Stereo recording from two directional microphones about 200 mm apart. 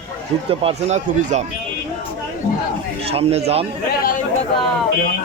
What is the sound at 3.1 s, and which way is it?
Speech, 30° right (ahead or behind).